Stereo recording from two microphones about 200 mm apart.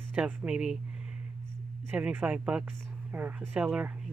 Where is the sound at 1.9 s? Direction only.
10° right (ahead or behind).